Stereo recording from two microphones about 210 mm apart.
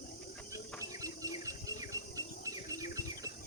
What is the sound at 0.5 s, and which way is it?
Bird, 15° right (ahead or behind).